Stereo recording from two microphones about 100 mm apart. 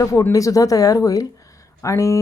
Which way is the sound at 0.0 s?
30° left (ahead or behind).